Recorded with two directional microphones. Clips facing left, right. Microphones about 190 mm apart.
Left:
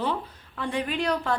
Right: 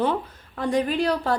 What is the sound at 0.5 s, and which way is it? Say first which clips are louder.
Speech: right 6 dB; 40° right (ahead or behind).